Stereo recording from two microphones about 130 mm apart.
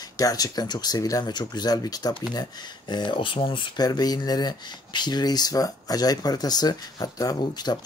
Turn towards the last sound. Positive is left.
turn(degrees=30)  # may be behind; listen again after turning